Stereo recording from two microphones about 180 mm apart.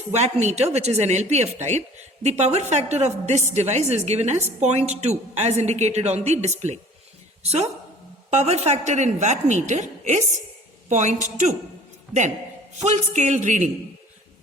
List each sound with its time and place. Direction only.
0.1 s a woman's voice: 40° right (ahead or behind)